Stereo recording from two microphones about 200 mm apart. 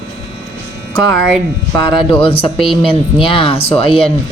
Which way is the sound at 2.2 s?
25° left (ahead or behind).